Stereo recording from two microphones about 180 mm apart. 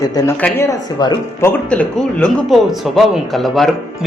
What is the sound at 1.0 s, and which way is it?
Speech, 25° left (ahead or behind).